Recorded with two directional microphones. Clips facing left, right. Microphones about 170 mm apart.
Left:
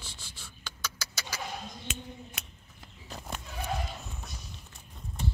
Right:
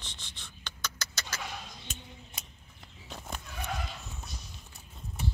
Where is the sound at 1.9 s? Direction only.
75° left (ahead or behind).